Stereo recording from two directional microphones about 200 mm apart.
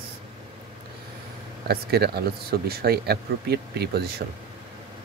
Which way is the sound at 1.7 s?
55° right (ahead or behind).